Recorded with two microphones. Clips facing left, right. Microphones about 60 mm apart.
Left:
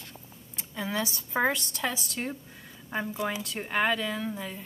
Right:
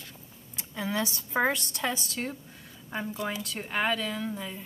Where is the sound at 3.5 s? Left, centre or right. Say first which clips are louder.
Left 2 dB; centre.